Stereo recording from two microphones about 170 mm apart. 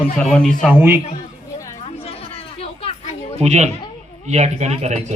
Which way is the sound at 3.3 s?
40° right (ahead or behind).